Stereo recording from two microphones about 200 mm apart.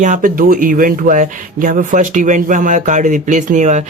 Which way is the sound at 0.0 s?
40° right (ahead or behind).